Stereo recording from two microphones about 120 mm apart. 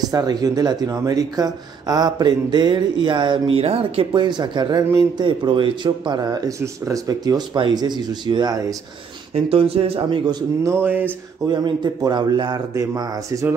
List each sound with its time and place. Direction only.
0.1 s speech: 30° right (ahead or behind); by 4.1 s 55° right (ahead or behind)
4.1 s speech: 40° right (ahead or behind)
9.3 s speech: 50° right (ahead or behind)
10.6 s a sound: 20° right (ahead or behind)
11.4 s speech: 35° right (ahead or behind)